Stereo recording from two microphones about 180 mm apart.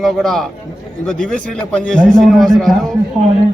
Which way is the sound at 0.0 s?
Centre (ahead or behind).